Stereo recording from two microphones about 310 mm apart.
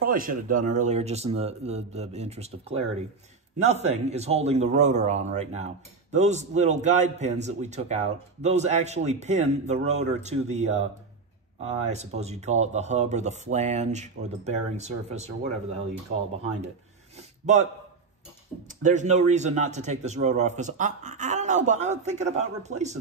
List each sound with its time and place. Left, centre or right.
0.0 s a man's voice: right
11.9 s a man's voice: right
18.8 s a man's voice: right